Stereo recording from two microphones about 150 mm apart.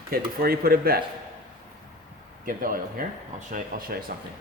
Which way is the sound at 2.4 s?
70° right (ahead or behind).